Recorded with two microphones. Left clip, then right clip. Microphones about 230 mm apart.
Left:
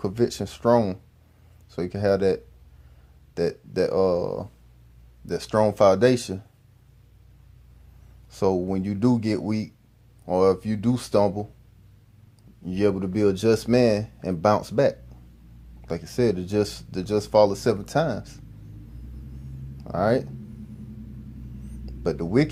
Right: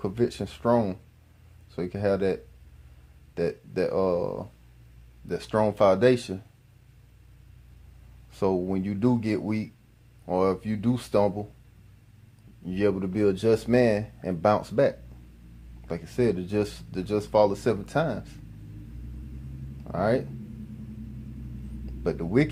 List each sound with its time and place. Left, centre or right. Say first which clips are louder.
0.0 s speech: left 3 dB; left
8.3 s speech: left 3 dB; left
12.6 s speech: left 2 dB; left
19.8 s speech: left 3 dB; left
21.8 s speech: left 3 dB; left